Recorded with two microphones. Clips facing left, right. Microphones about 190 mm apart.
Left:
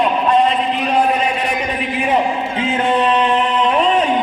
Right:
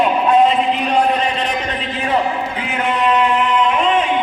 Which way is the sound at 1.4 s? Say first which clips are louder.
Left 1 dB; 10° left (ahead or behind).